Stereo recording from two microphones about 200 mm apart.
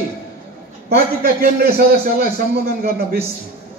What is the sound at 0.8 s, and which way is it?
A man's voice, 50° right (ahead or behind).